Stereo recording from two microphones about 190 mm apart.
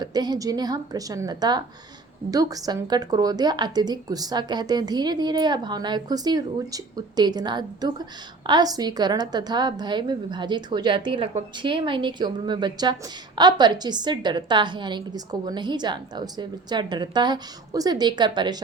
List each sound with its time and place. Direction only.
0.0 s a woman's voice: 20° right (ahead or behind)